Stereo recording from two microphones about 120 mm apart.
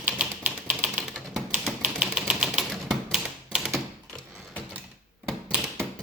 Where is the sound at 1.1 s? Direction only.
Centre (ahead or behind).